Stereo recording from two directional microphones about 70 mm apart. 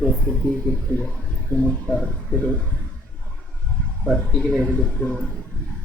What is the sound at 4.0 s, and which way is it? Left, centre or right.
Speech, centre.